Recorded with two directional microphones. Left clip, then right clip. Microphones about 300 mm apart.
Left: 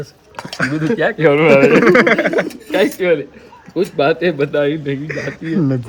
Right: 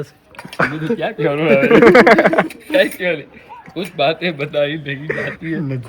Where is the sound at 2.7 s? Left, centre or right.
Centre.